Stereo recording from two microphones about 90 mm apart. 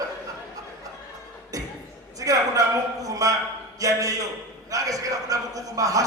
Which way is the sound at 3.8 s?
40° right (ahead or behind).